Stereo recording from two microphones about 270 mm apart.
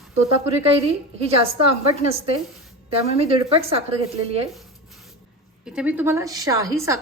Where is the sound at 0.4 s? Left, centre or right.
Right.